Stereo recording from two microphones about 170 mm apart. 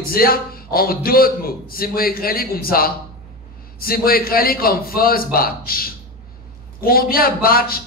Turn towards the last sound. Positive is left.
turn(degrees=60)  # may be behind; listen again after turning